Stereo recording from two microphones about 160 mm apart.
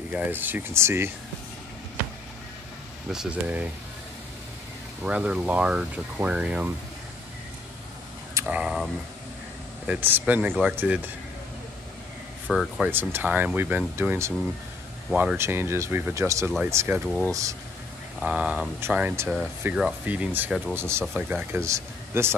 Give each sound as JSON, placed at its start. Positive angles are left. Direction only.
{"t": 0.1, "sound": "speech", "side_deg": -10}
{"t": 3.1, "sound": "speech", "side_deg": -5}
{"t": 5.0, "sound": "speech", "side_deg": -5}
{"t": 8.4, "sound": "speech", "side_deg": -10}
{"t": 12.4, "sound": "speech", "side_deg": 0}
{"t": 12.9, "sound": "speech", "side_deg": -10}
{"t": 15.0, "sound": "speech", "side_deg": -5}
{"t": 15.3, "sound": "speech", "side_deg": -15}
{"t": 18.2, "sound": "speech", "side_deg": -5}
{"t": 21.0, "sound": "speech", "side_deg": -5}